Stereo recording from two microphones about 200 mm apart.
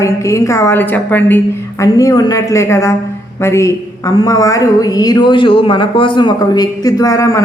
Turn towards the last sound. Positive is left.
turn(degrees=15)  # may be behind; listen again after turning